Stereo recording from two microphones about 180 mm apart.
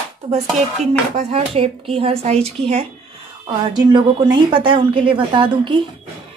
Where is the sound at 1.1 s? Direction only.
30° right (ahead or behind).